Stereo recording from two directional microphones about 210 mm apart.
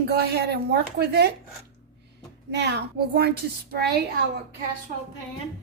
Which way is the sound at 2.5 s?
50° right (ahead or behind).